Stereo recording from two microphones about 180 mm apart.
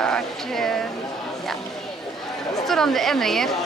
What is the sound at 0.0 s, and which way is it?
Speech, 5° left (ahead or behind).